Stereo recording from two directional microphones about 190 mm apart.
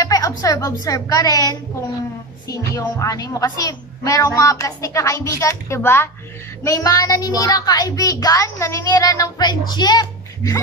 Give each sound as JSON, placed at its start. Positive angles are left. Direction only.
{"t": 0.0, "sound": "music", "side_deg": 20}
{"t": 0.4, "sound": "a woman's voice", "side_deg": 20}